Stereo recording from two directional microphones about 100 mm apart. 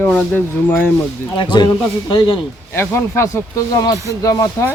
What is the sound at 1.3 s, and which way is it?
A man's voice, 50° left (ahead or behind).